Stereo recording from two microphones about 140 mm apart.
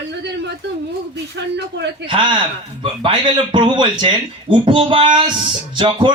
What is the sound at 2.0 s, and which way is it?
Speech, 35° right (ahead or behind).